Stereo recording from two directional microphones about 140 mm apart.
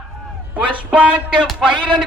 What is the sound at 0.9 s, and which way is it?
Speech, 10° right (ahead or behind).